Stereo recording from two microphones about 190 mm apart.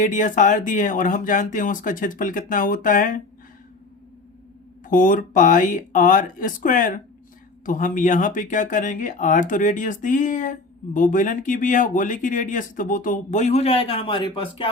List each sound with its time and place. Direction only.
0.0 s speech: 40° left (ahead or behind)
4.9 s speech: 45° left (ahead or behind); by 14.7 s 25° left (ahead or behind)